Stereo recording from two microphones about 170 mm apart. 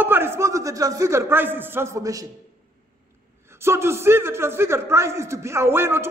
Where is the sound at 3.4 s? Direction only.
15° right (ahead or behind).